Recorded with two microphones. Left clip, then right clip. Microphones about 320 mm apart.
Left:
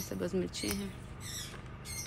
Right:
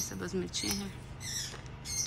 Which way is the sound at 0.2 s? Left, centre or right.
Centre.